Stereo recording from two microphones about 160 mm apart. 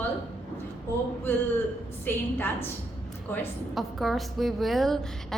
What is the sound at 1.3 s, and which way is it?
A woman's voice, 10° left (ahead or behind).